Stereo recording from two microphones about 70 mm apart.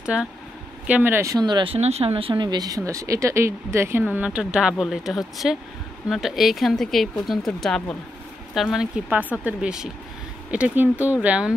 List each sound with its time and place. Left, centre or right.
0.0 s speech: centre
1.7 s speech: right
2.3 s speech: right
4.0 s speech: right; by 8.8 s centre
8.9 s speech: right